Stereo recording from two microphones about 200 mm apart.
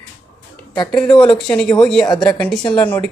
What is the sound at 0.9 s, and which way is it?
Speech, 5° left (ahead or behind).